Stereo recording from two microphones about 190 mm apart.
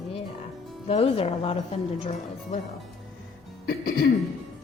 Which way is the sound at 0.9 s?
30° left (ahead or behind).